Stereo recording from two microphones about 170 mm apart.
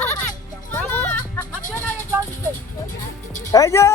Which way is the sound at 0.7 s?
10° left (ahead or behind).